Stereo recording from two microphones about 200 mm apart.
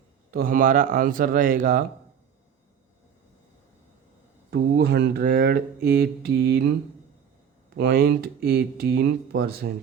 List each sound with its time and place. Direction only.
0.3 s speech: 45° right (ahead or behind)
4.5 s speech: 55° right (ahead or behind)
7.8 s speech: 50° right (ahead or behind)